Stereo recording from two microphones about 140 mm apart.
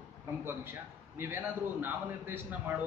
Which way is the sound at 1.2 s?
15° right (ahead or behind).